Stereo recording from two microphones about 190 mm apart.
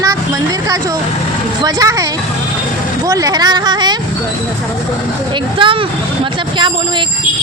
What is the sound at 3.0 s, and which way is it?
Speech, 20° right (ahead or behind).